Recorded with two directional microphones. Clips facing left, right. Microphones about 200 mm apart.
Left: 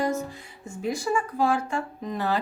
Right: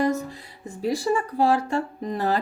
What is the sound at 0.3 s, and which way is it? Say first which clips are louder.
Speech: right 1 dB; 35° right (ahead or behind).